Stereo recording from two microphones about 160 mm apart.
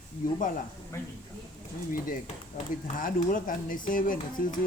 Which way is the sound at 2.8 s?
55° left (ahead or behind).